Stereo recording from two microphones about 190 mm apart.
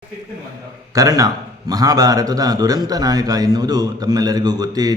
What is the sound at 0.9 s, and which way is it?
A man's voice, 20° right (ahead or behind).